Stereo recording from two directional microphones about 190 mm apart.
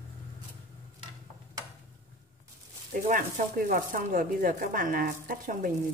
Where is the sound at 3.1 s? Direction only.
45° right (ahead or behind).